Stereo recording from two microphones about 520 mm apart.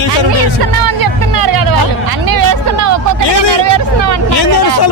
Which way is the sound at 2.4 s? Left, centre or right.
Right.